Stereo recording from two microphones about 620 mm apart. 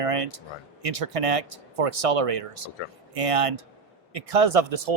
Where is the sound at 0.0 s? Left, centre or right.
Right.